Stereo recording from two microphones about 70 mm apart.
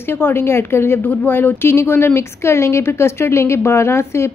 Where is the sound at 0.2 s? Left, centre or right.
Left.